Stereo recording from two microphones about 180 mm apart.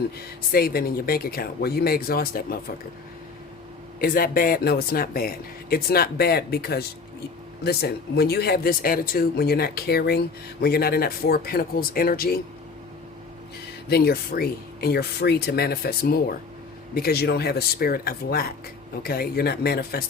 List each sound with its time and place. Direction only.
0.2 s speech: 55° left (ahead or behind)
4.0 s speech: 55° left (ahead or behind)
13.8 s speech: 60° left (ahead or behind)